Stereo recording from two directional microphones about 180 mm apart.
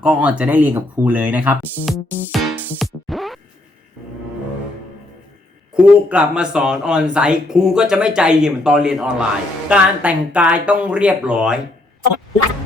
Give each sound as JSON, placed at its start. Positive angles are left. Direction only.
{"t": 0.0, "sound": "speech", "side_deg": -5}
{"t": 2.3, "sound": "music", "side_deg": -5}
{"t": 5.7, "sound": "speech", "side_deg": -5}